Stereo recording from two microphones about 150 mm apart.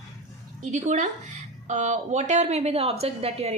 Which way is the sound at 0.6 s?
55° right (ahead or behind).